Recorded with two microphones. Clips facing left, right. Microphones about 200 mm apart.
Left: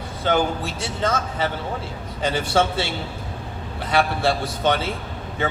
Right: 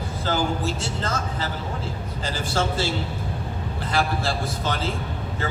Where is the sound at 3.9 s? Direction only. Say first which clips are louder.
Left 5 dB; 65° left (ahead or behind).